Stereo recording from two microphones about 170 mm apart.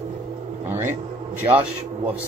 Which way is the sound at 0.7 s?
15° right (ahead or behind).